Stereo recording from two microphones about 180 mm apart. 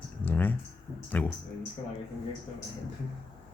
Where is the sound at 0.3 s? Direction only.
10° left (ahead or behind).